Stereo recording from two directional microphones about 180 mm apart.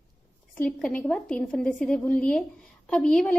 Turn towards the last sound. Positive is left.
turn(degrees=5)  # may be behind; listen again after turning